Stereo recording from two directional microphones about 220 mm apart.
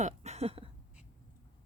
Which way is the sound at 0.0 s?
30° right (ahead or behind).